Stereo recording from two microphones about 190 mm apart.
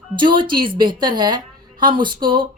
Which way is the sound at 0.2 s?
25° right (ahead or behind).